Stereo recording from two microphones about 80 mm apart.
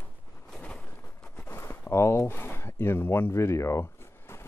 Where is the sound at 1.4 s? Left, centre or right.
Left.